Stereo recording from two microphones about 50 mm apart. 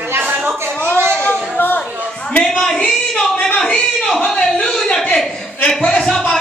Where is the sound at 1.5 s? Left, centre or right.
Left.